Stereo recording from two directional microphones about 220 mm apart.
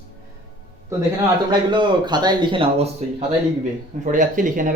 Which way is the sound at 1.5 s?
20° right (ahead or behind).